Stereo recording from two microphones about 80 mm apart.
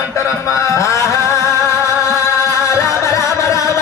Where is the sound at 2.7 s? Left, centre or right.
Left.